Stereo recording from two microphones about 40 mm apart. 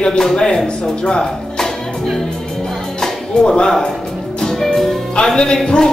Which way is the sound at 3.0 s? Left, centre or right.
Centre.